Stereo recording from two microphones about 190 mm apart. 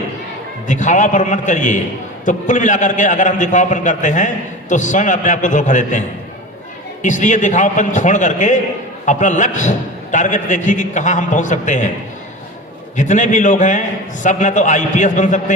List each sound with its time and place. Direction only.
0.7 s a man's voice: 40° left (ahead or behind)
7.0 s a man's voice: 40° left (ahead or behind)
13.0 s a man's voice: 40° left (ahead or behind)